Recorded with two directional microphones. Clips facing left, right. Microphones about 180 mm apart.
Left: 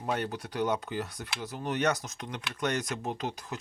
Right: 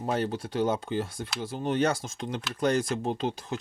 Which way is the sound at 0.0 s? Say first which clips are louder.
Right 4 dB; 30° right (ahead or behind).